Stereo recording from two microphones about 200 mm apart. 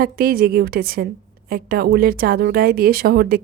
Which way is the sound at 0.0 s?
50° right (ahead or behind).